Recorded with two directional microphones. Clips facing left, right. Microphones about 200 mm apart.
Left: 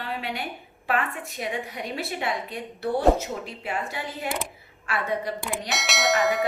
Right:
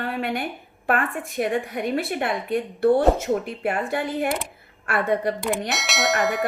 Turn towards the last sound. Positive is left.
turn(degrees=0)  # may be behind; listen again after turning